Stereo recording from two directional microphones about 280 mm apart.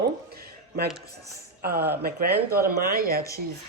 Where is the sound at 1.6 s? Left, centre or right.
Right.